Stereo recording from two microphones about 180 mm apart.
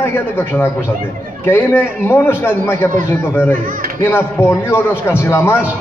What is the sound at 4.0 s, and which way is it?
A man's voice, 10° left (ahead or behind).